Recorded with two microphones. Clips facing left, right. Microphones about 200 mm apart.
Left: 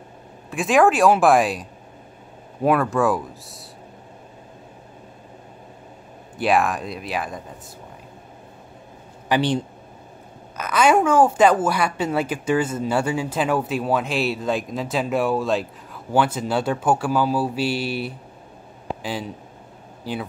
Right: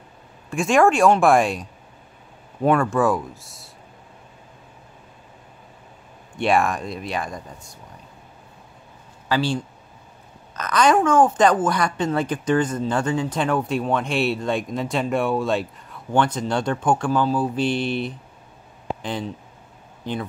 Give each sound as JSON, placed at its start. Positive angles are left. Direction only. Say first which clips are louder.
{"t": 0.5, "sound": "speech", "louder": "even", "side_deg": 0}
{"t": 6.3, "sound": "speech", "louder": "even", "side_deg": 0}
{"t": 9.3, "sound": "speech", "louder": "left 2 dB", "side_deg": 20}
{"t": 10.6, "sound": "a woman's voice", "louder": "even", "side_deg": 10}